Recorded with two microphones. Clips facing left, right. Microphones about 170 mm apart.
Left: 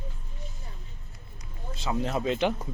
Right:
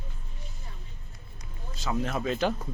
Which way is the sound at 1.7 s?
25° left (ahead or behind).